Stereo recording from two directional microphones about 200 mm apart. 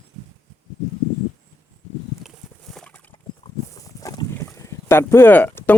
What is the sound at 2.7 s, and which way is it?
Horse, 5° left (ahead or behind).